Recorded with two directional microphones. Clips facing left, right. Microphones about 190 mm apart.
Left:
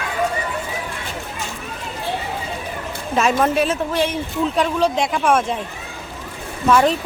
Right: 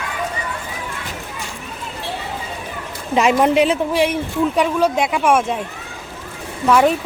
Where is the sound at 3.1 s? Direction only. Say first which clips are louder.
Right 3 dB; 15° right (ahead or behind).